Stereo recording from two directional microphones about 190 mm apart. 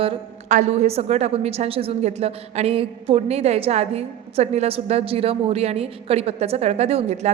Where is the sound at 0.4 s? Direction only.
40° right (ahead or behind).